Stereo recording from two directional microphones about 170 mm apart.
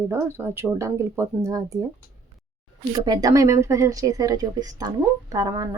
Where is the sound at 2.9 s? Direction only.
20° right (ahead or behind).